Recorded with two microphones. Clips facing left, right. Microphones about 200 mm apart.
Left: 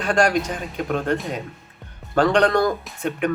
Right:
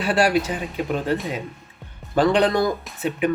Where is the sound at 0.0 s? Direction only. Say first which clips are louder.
Even; 5° right (ahead or behind).